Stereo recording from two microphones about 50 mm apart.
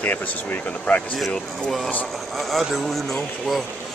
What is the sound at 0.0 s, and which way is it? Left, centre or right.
Speech, left.